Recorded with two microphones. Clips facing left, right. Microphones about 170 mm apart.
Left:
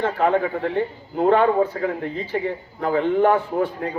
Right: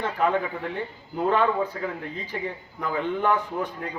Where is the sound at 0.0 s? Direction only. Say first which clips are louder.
Left 5 dB; 50° left (ahead or behind).